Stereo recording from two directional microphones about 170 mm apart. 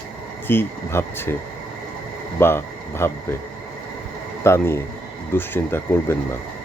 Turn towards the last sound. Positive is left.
turn(degrees=15)  # may be behind; listen again after turning